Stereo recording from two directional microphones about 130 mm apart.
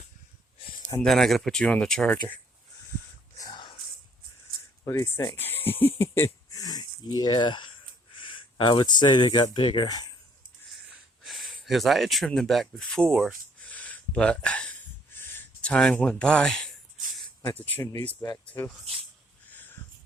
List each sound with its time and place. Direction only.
1.0 s speech: centre (ahead or behind)
3.3 s a sound: 30° left (ahead or behind)
4.9 s speech: 20° left (ahead or behind)
11.2 s speech: centre (ahead or behind)
13.7 s a sound: 10° left (ahead or behind)
15.2 s speech: 15° left (ahead or behind)